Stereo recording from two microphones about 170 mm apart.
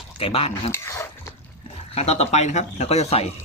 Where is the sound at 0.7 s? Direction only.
15° left (ahead or behind).